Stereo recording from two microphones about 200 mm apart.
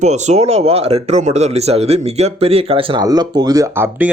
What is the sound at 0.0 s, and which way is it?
A man's voice, 35° right (ahead or behind).